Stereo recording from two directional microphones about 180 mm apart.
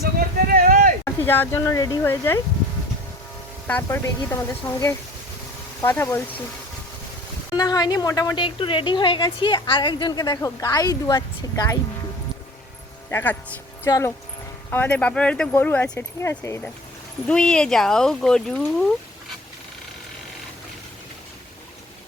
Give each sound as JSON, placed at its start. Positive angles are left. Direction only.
{"t": 0.4, "sound": "a sound", "side_deg": -50}
{"t": 1.0, "sound": "speech", "side_deg": 10}
{"t": 3.7, "sound": "speech", "side_deg": 10}
{"t": 7.5, "sound": "a woman's voice", "side_deg": 20}
{"t": 13.1, "sound": "speech", "side_deg": 15}